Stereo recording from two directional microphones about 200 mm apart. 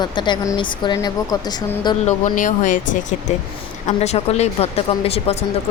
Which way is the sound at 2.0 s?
40° left (ahead or behind).